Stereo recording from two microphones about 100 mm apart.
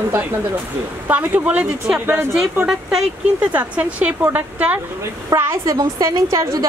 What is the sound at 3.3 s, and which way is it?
A woman's voice, 15° right (ahead or behind).